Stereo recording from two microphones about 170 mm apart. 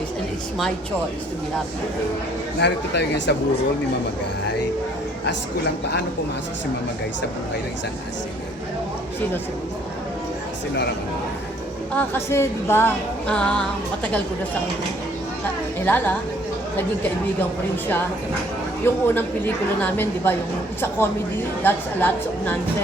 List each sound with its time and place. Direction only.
2.6 s speech: 90° left
11.9 s a woman's voice: 15° left (ahead or behind)
15.8 s a woman's voice: 10° left (ahead or behind)
18.8 s a woman's voice: 15° left (ahead or behind)